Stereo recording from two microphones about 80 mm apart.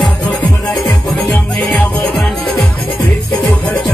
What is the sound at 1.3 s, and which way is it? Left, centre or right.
Music, left.